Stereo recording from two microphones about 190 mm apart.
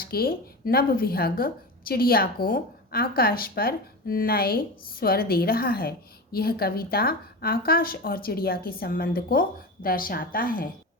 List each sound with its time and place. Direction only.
0.0 s speech: 50° left (ahead or behind)